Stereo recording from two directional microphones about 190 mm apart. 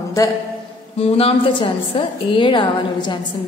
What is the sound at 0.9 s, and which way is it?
A woman's voice, 30° left (ahead or behind).